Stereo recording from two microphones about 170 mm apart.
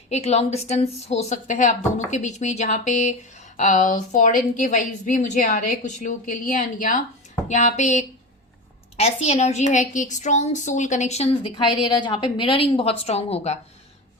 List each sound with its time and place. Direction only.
0.1 s a woman's voice: 40° left (ahead or behind)